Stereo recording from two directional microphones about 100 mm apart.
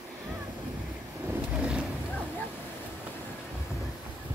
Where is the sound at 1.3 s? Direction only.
10° right (ahead or behind).